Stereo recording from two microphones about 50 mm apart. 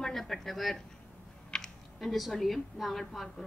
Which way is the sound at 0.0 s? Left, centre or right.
Centre.